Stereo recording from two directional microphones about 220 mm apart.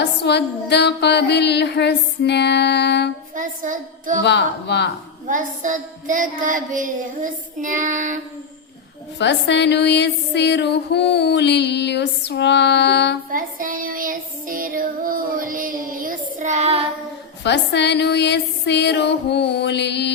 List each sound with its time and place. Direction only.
0.0 s music: 50° left (ahead or behind)
3.3 s child singing: 35° right (ahead or behind)
4.2 s music: 50° left (ahead or behind)
5.3 s child singing: 35° right (ahead or behind)
9.1 s music: 55° left (ahead or behind)
13.3 s child singing: 40° right (ahead or behind)
17.4 s music: 50° left (ahead or behind)